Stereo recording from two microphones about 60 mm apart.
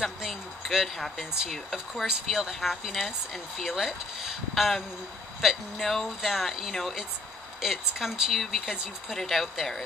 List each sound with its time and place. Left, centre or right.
0.0 s a sound: centre
1.5 s speech: centre
2.0 s speech: centre